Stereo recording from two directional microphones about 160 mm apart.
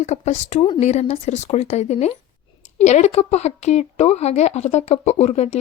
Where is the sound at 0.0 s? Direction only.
45° left (ahead or behind).